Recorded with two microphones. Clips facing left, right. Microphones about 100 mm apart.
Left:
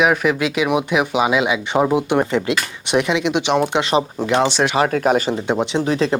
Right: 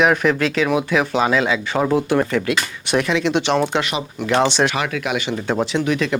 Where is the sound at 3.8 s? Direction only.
30° left (ahead or behind).